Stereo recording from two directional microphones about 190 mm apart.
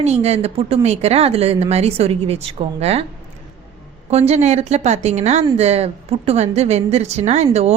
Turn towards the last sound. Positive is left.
turn(degrees=-35)  # may be behind; listen again after turning